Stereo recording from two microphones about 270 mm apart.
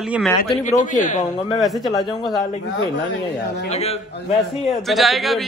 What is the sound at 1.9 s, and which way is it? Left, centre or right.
Speech, centre.